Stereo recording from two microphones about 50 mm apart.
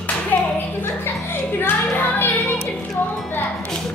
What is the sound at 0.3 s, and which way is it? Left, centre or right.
Clapping, left.